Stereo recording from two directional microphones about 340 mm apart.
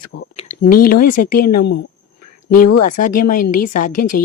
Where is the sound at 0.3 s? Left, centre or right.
Left.